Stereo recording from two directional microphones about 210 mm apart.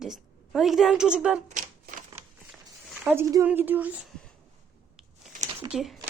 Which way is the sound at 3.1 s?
15° right (ahead or behind).